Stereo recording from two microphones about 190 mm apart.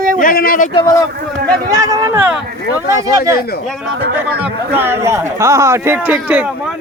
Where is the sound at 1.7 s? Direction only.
20° right (ahead or behind).